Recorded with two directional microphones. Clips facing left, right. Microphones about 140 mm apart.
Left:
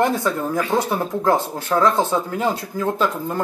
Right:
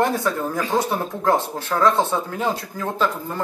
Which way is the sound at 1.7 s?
15° left (ahead or behind).